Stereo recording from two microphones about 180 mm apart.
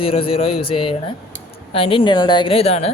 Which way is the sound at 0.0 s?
30° left (ahead or behind).